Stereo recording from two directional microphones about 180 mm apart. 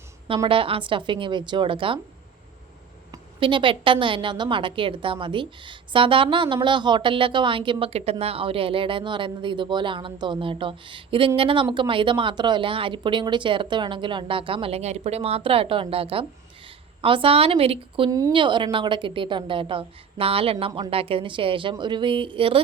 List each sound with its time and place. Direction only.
0.4 s a woman's voice: 30° right (ahead or behind)
3.1 s a woman's voice: 30° right (ahead or behind)